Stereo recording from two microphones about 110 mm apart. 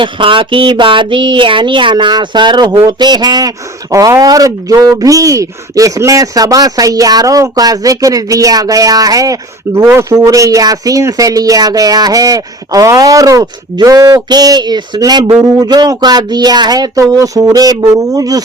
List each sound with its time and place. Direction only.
0.0 s speech: 50° right (ahead or behind); by 18.4 s 35° right (ahead or behind)